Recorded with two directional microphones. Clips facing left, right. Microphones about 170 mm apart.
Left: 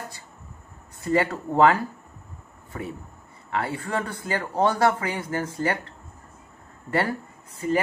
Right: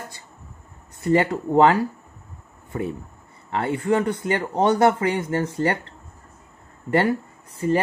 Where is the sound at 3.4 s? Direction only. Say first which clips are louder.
Right 6 dB; 25° right (ahead or behind).